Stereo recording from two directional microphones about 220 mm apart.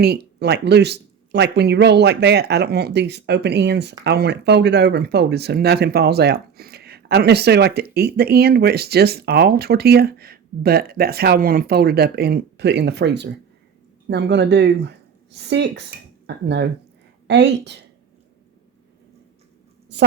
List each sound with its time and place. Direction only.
0.0 s speech: 50° right (ahead or behind)